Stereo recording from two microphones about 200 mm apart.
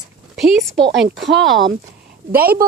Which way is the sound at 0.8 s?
65° right (ahead or behind).